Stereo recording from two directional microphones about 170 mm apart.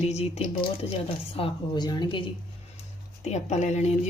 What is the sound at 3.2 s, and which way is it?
Speech, 40° left (ahead or behind).